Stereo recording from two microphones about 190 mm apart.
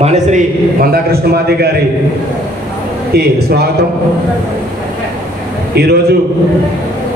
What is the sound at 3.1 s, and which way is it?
Speech, 55° right (ahead or behind).